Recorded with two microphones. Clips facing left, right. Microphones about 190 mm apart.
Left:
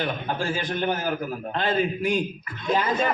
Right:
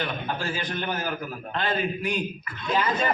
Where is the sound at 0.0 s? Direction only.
45° left (ahead or behind).